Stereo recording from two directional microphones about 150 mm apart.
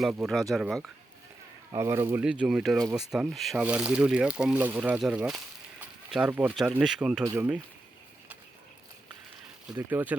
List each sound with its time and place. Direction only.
0.3 s speech: centre (ahead or behind)
1.7 s speech: 20° right (ahead or behind)
2.2 s speech: 5° right (ahead or behind)
5.8 s a sound: 5° right (ahead or behind)
6.5 s speech: 5° right (ahead or behind)
7.3 s speech: 15° right (ahead or behind)
9.7 s speech: 15° right (ahead or behind)